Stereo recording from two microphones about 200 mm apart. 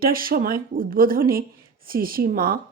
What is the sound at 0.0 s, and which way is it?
Speech, 45° right (ahead or behind).